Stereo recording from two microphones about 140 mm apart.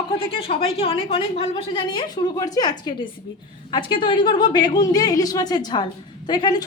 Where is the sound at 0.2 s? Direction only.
40° left (ahead or behind).